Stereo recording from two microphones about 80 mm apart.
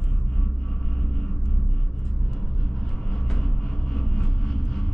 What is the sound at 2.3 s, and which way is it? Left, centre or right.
Vehicle, centre.